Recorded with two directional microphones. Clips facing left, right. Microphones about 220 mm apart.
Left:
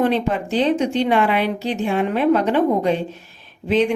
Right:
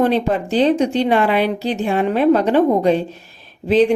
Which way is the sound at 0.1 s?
35° right (ahead or behind).